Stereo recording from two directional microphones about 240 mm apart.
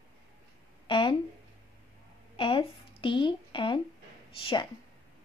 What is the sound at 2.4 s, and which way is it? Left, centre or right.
A woman's voice, left.